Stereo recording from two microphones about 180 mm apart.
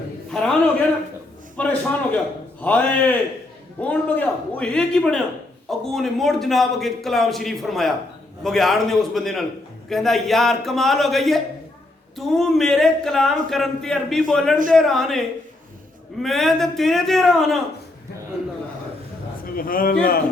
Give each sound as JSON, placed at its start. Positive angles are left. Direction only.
{"t": 0.3, "sound": "a sound", "side_deg": 5}
{"t": 1.5, "sound": "a man's voice", "side_deg": 10}
{"t": 16.2, "sound": "a man's voice", "side_deg": 0}
{"t": 19.5, "sound": "a man's voice", "side_deg": 55}